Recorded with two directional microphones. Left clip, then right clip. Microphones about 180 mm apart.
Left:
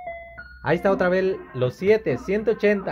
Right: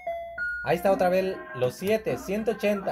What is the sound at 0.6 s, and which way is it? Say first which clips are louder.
Speech: left 3 dB; 50° left (ahead or behind).